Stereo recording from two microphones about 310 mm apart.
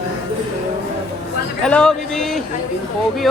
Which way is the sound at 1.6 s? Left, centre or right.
Centre.